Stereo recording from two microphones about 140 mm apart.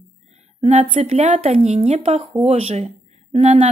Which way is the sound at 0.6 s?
50° right (ahead or behind).